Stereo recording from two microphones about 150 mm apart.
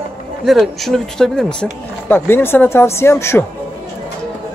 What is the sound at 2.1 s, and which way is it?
Speech, 15° left (ahead or behind).